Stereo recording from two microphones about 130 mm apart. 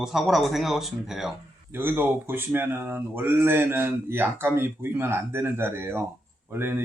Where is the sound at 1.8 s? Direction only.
15° right (ahead or behind).